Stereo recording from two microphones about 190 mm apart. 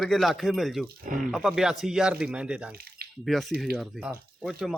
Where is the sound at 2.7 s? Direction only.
55° right (ahead or behind).